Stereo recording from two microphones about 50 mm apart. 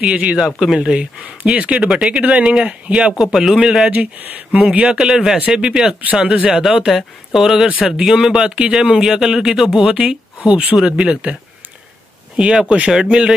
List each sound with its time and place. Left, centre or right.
0.0 s speech: right
3.2 s speech: centre
3.9 s speech: right
4.8 s speech: centre
12.4 s speech: centre